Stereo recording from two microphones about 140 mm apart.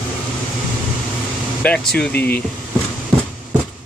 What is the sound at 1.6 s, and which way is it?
Speech, 10° left (ahead or behind).